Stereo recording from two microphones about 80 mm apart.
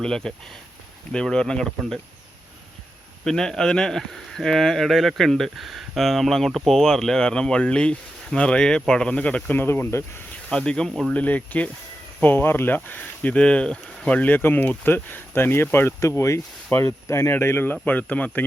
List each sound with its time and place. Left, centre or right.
0.0 s speech: centre
3.2 s speech: centre
9.6 s speech: left
10.5 s speech: centre
11.1 s speech: centre